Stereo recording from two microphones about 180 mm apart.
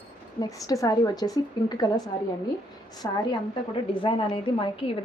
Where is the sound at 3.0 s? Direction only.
20° left (ahead or behind).